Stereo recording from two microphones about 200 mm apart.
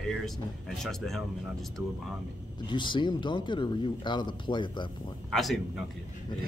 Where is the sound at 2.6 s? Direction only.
25° left (ahead or behind).